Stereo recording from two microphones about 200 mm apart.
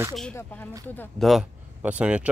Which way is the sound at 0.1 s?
5° left (ahead or behind).